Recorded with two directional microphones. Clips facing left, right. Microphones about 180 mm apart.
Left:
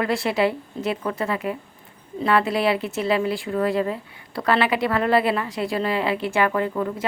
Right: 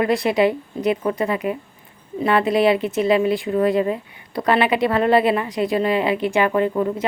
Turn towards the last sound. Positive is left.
turn(degrees=-20)  # may be behind; listen again after turning